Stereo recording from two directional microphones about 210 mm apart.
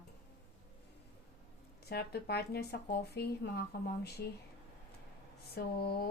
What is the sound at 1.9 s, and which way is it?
Speech, 50° left (ahead or behind).